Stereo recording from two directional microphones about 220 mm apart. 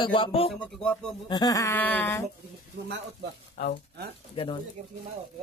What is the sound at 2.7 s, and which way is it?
Speech, 50° right (ahead or behind).